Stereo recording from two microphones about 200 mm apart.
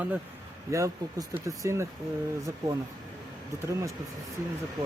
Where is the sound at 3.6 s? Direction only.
15° right (ahead or behind).